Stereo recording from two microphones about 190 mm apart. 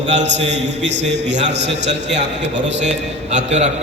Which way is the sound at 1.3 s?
70° right (ahead or behind).